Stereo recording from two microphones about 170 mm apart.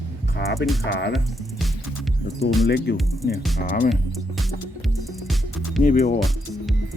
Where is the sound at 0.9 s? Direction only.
75° left (ahead or behind).